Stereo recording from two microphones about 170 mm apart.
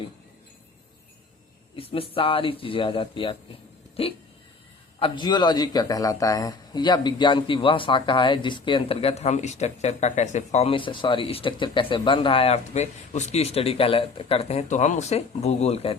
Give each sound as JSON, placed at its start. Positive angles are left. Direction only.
{"t": 1.7, "sound": "a man's voice", "side_deg": 35}
{"t": 4.9, "sound": "a man's voice", "side_deg": 30}